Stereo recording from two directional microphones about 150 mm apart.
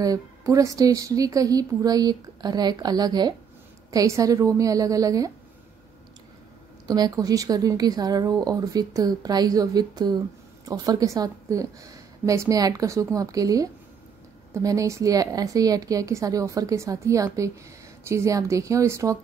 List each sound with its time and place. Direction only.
0.0 s speech: 25° right (ahead or behind)
6.9 s speech: 25° right (ahead or behind)